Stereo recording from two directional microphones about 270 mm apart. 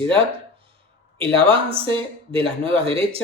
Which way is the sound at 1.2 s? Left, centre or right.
Centre.